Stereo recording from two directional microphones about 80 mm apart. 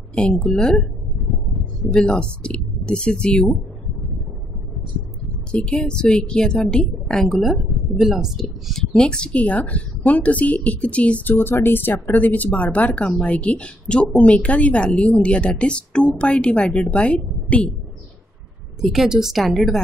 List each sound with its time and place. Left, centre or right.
0.1 s a woman's voice: centre
1.9 s a woman's voice: centre
5.5 s a woman's voice: centre
7.9 s a woman's voice: centre
8.9 s a woman's voice: centre
11.3 s a woman's voice: left
18.8 s a woman's voice: centre